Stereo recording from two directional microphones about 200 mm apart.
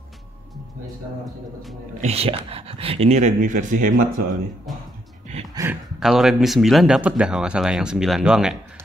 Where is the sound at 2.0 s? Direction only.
30° right (ahead or behind).